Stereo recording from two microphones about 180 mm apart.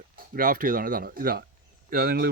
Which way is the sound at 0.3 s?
50° right (ahead or behind).